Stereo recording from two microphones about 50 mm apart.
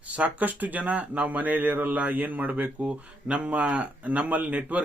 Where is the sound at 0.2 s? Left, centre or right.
Right.